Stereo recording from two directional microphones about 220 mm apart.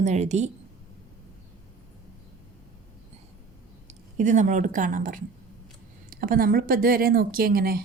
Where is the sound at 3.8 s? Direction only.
35° right (ahead or behind).